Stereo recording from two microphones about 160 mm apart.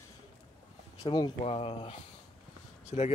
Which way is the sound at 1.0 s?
25° left (ahead or behind).